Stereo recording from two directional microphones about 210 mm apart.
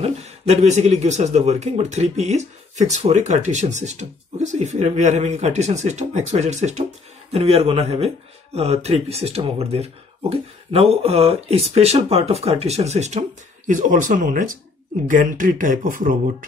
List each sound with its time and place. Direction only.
0.0 s speech: 30° right (ahead or behind)